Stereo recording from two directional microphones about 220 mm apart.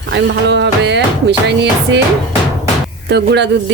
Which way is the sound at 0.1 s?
55° right (ahead or behind).